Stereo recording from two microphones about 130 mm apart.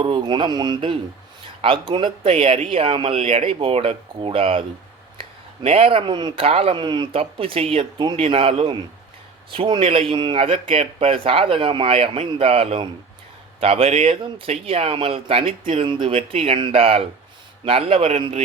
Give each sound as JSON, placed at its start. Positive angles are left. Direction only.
{"t": 0.0, "sound": "speech", "side_deg": -40}
{"t": 5.6, "sound": "speech", "side_deg": -50}